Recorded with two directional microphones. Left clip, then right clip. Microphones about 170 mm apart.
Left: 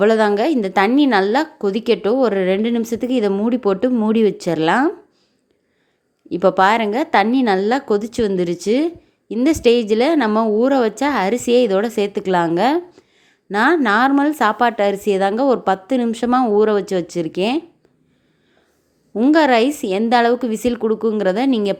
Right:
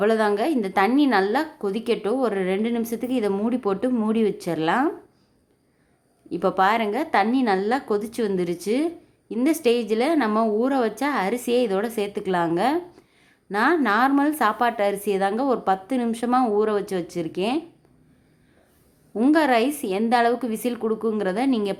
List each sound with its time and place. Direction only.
0.0 s a woman's voice: 30° left (ahead or behind)
6.3 s a woman's voice: 30° left (ahead or behind)
19.1 s a woman's voice: 25° left (ahead or behind)